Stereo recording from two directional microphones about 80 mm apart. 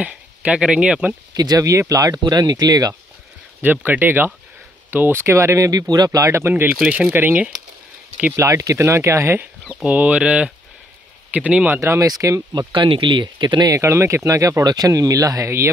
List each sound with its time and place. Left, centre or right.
0.0 s speech: centre
1.3 s speech: right
3.6 s speech: right
5.7 s speech: right
6.5 s speech: centre
8.4 s speech: right
9.8 s speech: centre
11.8 s speech: right
12.5 s speech: right
13.7 s speech: right